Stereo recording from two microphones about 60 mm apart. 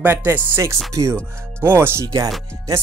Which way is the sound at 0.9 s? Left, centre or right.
Right.